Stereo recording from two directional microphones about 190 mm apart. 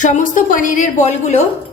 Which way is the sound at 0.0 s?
45° left (ahead or behind).